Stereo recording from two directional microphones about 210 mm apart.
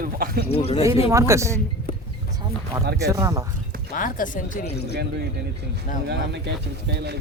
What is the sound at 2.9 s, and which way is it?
Speech, 15° right (ahead or behind).